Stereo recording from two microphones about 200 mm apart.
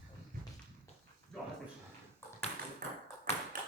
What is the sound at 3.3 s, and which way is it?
Tap, 15° left (ahead or behind).